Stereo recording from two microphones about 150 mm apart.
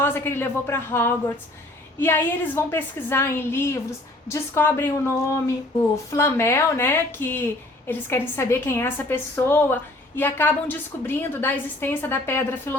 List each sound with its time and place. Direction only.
0.0 s a woman's voice: 15° left (ahead or behind)